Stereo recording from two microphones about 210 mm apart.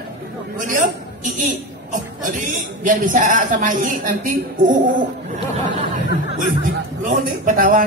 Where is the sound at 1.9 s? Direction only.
35° right (ahead or behind).